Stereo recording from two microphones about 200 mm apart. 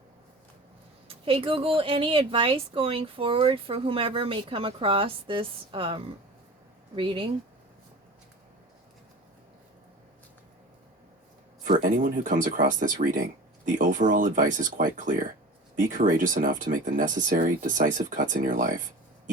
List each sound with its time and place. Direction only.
1.0 s speech: 30° right (ahead or behind)
11.6 s speech: 45° right (ahead or behind)